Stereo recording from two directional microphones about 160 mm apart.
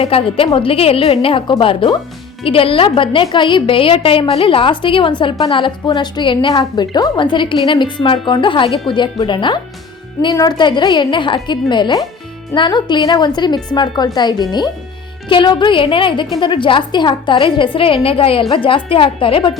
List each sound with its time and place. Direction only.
0.0 s a woman's voice: 35° left (ahead or behind)